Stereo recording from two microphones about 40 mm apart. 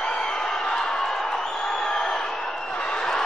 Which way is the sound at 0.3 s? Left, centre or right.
Centre.